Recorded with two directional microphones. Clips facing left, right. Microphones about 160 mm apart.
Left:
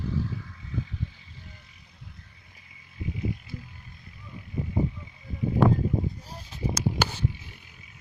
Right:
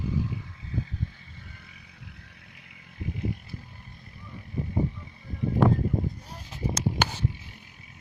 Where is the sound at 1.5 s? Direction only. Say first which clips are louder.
Right 3 dB; 65° right (ahead or behind).